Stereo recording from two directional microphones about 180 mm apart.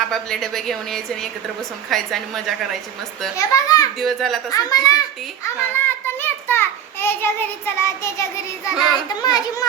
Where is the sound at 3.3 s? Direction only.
20° left (ahead or behind).